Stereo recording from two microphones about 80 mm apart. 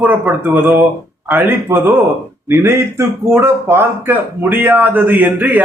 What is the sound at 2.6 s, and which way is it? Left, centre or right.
Speech, right.